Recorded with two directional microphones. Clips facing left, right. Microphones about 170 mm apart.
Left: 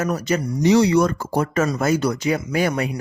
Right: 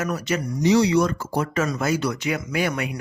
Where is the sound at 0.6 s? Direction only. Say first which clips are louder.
Left 2 dB; 55° left (ahead or behind).